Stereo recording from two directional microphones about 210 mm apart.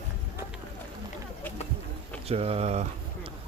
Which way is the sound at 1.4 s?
10° left (ahead or behind).